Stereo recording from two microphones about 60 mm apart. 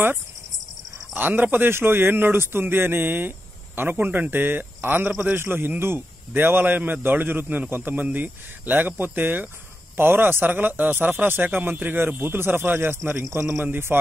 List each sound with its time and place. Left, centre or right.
1.1 s a man's voice: right